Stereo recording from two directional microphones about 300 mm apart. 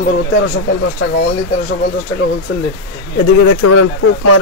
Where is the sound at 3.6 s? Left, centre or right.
Left.